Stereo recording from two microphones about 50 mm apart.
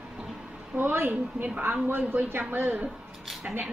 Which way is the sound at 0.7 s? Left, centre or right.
Right.